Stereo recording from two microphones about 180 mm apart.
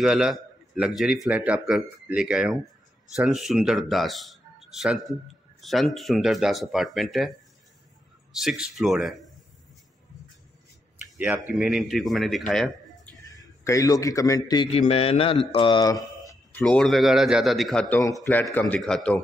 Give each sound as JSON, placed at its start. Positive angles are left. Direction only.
{"t": 0.0, "sound": "a man's voice", "side_deg": -5}
{"t": 11.1, "sound": "a man's voice", "side_deg": -5}
{"t": 13.3, "sound": "a man's voice", "side_deg": 20}
{"t": 16.6, "sound": "a man's voice", "side_deg": 5}